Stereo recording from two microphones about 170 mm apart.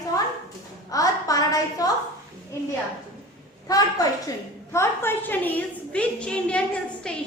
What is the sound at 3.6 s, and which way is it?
A woman's voice, 20° left (ahead or behind).